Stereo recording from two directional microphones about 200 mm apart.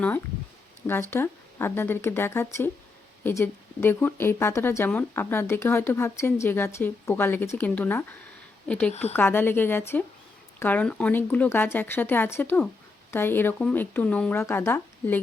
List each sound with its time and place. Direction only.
1.1 s a woman's voice: 10° left (ahead or behind)
8.9 s speech: 35° left (ahead or behind)
9.1 s speech: 10° left (ahead or behind)